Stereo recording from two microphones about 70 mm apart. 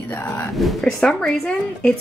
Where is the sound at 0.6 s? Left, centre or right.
Centre.